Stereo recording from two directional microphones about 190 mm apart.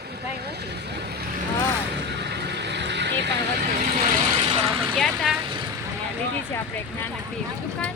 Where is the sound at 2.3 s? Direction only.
65° right (ahead or behind).